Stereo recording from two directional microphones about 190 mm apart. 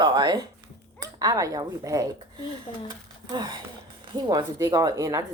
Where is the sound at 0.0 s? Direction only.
25° right (ahead or behind).